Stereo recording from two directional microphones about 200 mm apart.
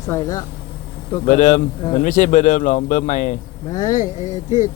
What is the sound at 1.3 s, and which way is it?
Speech, 40° left (ahead or behind).